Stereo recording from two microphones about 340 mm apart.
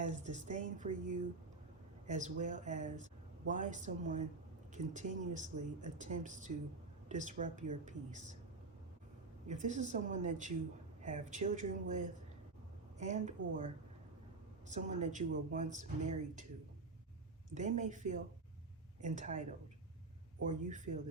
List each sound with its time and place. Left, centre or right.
0.0 s speech: right
9.5 s speech: right
14.7 s speech: right
17.5 s speech: right